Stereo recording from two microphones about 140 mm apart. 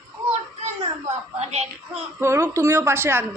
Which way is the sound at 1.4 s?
50° right (ahead or behind).